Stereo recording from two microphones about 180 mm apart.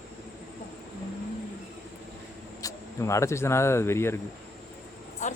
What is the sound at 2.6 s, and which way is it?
Speech, 15° left (ahead or behind).